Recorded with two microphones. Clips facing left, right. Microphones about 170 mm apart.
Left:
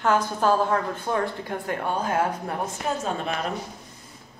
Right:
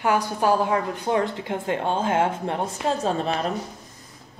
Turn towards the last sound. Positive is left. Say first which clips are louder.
# right 4 dB
turn(degrees=-35)  # may be behind; listen again after turning